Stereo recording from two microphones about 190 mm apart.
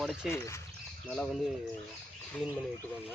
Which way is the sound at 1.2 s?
Centre (ahead or behind).